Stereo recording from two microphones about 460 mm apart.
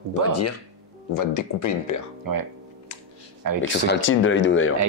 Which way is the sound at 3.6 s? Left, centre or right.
Left.